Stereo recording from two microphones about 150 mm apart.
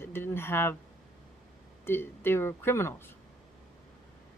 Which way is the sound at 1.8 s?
15° left (ahead or behind).